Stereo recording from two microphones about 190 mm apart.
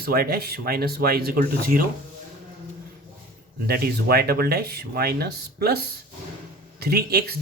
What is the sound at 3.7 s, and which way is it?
Speech, 55° right (ahead or behind).